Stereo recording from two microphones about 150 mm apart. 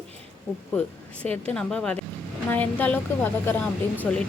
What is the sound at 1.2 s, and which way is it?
A woman's voice, 10° left (ahead or behind).